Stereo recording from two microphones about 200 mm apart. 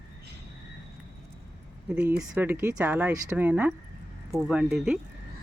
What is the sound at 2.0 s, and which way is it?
Speech, 5° right (ahead or behind).